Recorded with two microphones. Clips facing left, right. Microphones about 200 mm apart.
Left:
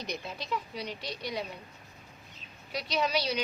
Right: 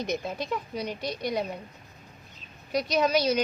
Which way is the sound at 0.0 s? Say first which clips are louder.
Right 8 dB; 50° right (ahead or behind).